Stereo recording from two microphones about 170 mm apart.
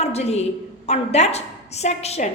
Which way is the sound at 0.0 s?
40° left (ahead or behind).